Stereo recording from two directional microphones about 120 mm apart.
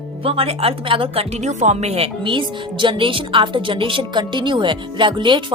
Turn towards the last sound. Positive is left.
turn(degrees=-40)  # may be behind; listen again after turning